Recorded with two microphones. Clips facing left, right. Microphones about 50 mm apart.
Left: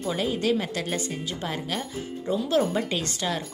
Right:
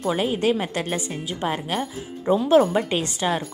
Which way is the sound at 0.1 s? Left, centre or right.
Right.